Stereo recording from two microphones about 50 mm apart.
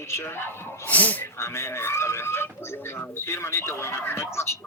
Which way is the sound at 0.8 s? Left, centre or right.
Left.